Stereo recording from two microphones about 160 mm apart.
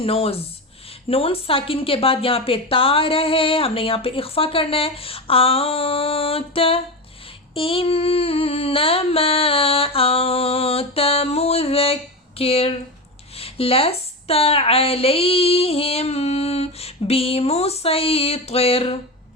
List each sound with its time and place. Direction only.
0.0 s speech: 35° left (ahead or behind)